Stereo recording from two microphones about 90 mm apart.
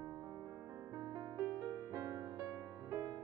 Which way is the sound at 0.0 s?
45° right (ahead or behind).